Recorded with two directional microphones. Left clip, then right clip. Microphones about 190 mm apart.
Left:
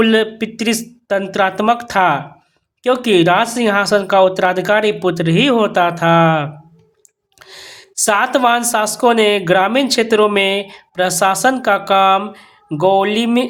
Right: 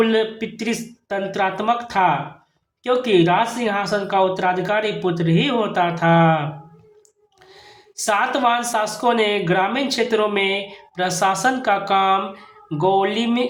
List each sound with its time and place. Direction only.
0.0 s speech: 35° left (ahead or behind)
7.5 s speech: 30° left (ahead or behind)